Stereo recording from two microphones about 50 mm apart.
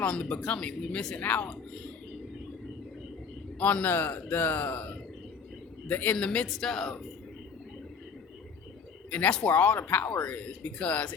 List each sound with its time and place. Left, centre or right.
0.1 s speech: left
3.6 s speech: left
3.8 s speech: left
5.9 s speech: left
6.5 s speech: centre
9.0 s speech: left